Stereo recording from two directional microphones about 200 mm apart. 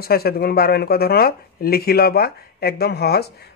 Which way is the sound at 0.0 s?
50° left (ahead or behind).